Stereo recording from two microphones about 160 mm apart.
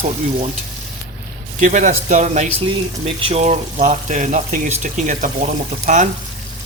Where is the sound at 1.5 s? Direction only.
50° right (ahead or behind).